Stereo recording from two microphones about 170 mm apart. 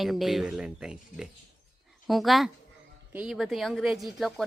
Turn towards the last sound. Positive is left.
turn(degrees=0)  # may be behind; listen again after turning